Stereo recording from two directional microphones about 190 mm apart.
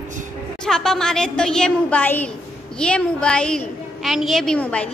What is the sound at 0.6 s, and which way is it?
A woman's voice, 5° left (ahead or behind).